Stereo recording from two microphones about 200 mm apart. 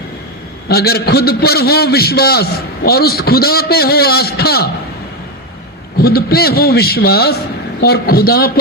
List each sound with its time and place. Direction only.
0.7 s a man's voice: 50° left (ahead or behind)
6.0 s a man's voice: 50° left (ahead or behind)